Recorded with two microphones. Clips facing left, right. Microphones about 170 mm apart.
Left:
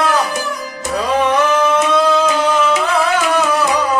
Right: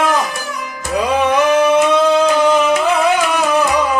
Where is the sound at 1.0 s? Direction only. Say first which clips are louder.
Right 1 dB; 15° right (ahead or behind).